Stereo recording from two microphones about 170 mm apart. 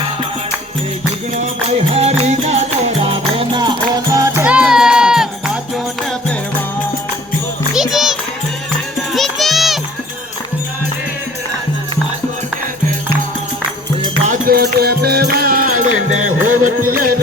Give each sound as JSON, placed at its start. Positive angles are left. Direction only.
{"t": 1.6, "sound": "music", "side_deg": -35}
{"t": 4.4, "sound": "music", "side_deg": -5}
{"t": 7.7, "sound": "music", "side_deg": 0}
{"t": 9.1, "sound": "music", "side_deg": 0}
{"t": 14.3, "sound": "music", "side_deg": -60}